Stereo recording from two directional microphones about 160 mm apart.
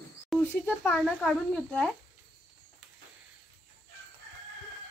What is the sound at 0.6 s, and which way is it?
Speech, 10° left (ahead or behind).